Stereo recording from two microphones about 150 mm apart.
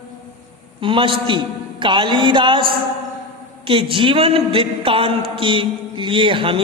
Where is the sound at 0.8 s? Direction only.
35° right (ahead or behind).